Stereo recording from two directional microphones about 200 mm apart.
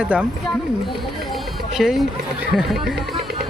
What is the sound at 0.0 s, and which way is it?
Speech, 5° right (ahead or behind).